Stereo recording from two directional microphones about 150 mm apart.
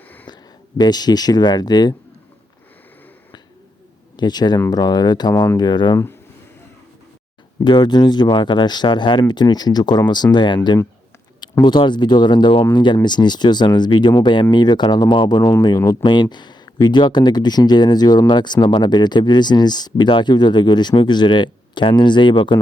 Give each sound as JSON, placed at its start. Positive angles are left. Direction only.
{"t": 0.3, "sound": "a sound", "side_deg": 30}
{"t": 0.8, "sound": "speech", "side_deg": 25}
{"t": 4.2, "sound": "speech", "side_deg": 30}
{"t": 7.6, "sound": "speech", "side_deg": 30}